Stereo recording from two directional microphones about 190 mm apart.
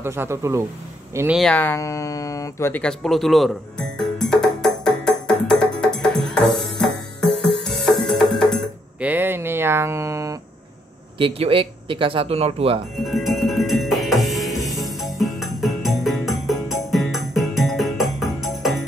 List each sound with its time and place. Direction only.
0.0 s speech: 15° right (ahead or behind)
1.4 s speech: 10° left (ahead or behind)
4.0 s music: centre (ahead or behind)
9.1 s a sound: 10° right (ahead or behind)
11.1 s speech: 30° right (ahead or behind)
13.0 s music: centre (ahead or behind)